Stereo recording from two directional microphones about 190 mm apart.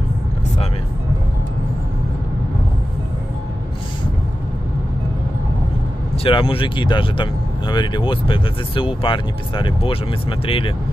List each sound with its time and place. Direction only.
6.1 s speech: 30° left (ahead or behind)